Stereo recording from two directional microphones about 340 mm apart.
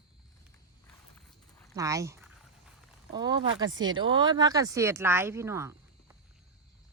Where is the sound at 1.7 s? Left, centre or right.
Centre.